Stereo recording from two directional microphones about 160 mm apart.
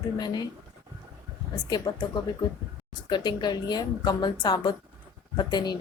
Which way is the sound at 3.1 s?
30° left (ahead or behind).